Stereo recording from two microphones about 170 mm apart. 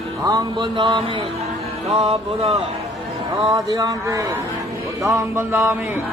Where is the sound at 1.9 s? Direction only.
40° right (ahead or behind).